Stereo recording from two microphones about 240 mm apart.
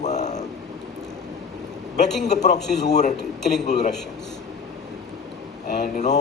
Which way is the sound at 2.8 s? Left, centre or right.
Left.